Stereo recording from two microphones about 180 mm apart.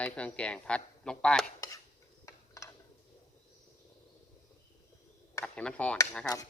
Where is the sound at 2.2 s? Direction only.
20° left (ahead or behind).